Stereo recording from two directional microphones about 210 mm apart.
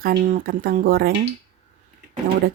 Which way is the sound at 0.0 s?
45° right (ahead or behind).